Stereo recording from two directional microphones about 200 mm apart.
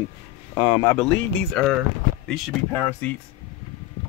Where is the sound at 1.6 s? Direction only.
Centre (ahead or behind).